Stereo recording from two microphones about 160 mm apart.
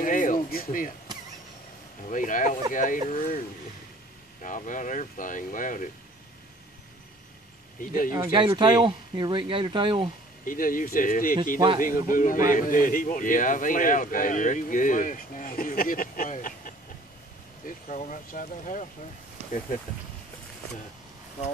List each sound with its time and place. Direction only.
0.0 s a sound: 55° left (ahead or behind)
2.0 s a man's voice: 55° left (ahead or behind)
8.1 s speech: 25° right (ahead or behind)
10.4 s a man's voice: 60° left (ahead or behind)